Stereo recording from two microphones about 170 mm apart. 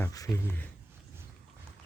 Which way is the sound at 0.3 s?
15° left (ahead or behind).